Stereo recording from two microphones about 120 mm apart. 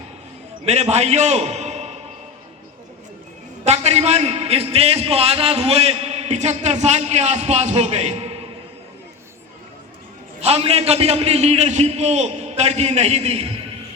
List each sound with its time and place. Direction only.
0.6 s a man's voice: 65° right (ahead or behind)
3.6 s a man's voice: 65° right (ahead or behind)
10.4 s a man's voice: 60° right (ahead or behind)